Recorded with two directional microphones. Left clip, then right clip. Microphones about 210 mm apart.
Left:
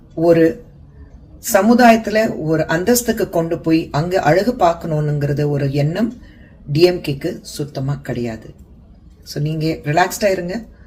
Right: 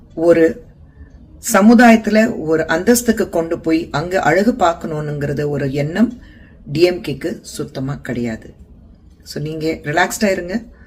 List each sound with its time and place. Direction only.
0.2 s speech: 15° right (ahead or behind)